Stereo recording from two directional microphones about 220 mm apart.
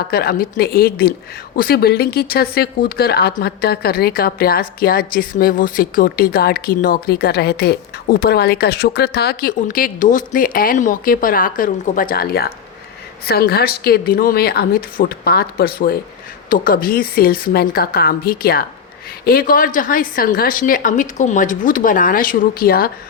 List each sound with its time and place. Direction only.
0.1 s speech: 45° left (ahead or behind)